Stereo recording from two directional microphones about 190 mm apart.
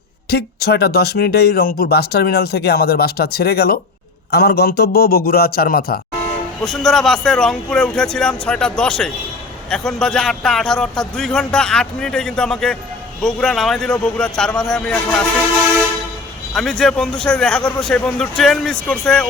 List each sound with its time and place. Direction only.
0.3 s a man's voice: 55° left (ahead or behind)
6.6 s speech: centre (ahead or behind)
16.6 s speech: centre (ahead or behind)